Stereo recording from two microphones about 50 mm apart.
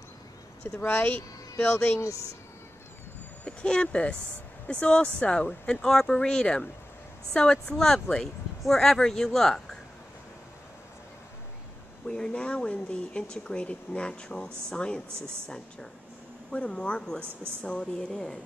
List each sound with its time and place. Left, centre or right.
0.7 s speech: left
3.4 s speech: centre
5.9 s speech: centre
6.1 s speech: centre
7.6 s speech: centre
12.3 s speech: centre
17.2 s a woman's voice: right
17.6 s speech: left